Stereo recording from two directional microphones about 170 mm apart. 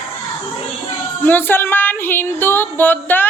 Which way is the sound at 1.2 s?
10° left (ahead or behind).